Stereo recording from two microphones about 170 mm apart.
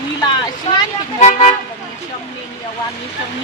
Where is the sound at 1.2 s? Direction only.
45° left (ahead or behind).